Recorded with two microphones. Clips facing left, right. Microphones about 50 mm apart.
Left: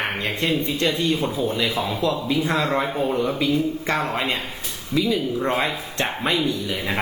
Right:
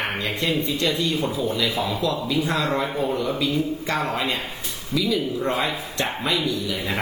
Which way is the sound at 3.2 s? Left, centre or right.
Left.